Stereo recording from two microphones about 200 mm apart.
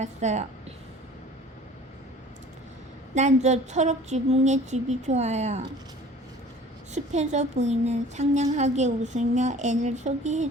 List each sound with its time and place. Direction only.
0.0 s a woman's voice: 35° right (ahead or behind)
3.2 s speech: 35° right (ahead or behind)
6.9 s speech: 35° right (ahead or behind)